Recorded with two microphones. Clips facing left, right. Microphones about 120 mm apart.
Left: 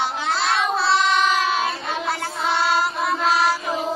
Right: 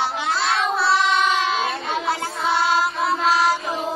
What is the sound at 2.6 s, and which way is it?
Music, 15° right (ahead or behind).